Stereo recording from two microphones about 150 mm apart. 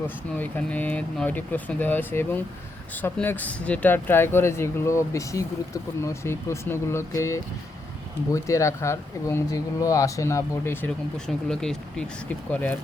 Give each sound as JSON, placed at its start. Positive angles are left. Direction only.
{"t": 0.3, "sound": "speech", "side_deg": 10}
{"t": 11.4, "sound": "speech", "side_deg": 5}